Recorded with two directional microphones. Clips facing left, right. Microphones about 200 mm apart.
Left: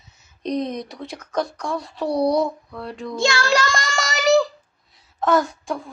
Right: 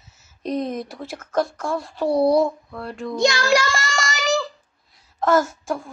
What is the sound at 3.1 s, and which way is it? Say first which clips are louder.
Child singing: right 2 dB; 20° right (ahead or behind).